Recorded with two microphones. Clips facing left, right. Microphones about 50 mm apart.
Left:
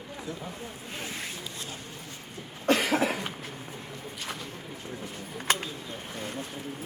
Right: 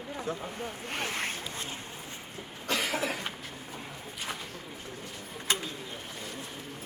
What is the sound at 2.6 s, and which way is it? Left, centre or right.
Cough, left.